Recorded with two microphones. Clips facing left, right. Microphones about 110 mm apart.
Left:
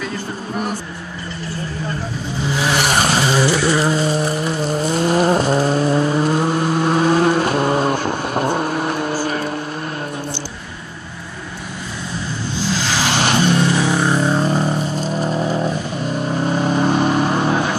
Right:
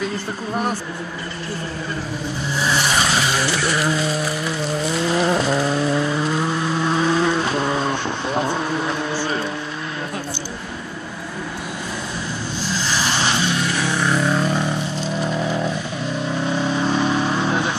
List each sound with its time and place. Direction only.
2.5 s vehicle: 75° left (ahead or behind)
2.9 s vehicle: 45° left (ahead or behind)
3.2 s vehicle: 30° left (ahead or behind)
12.7 s vehicle: 90° left; by 13.6 s 50° left (ahead or behind)
13.7 s vehicle: 30° left (ahead or behind)
15.3 s vehicle: 30° left (ahead or behind)
16.3 s vehicle: 45° left (ahead or behind)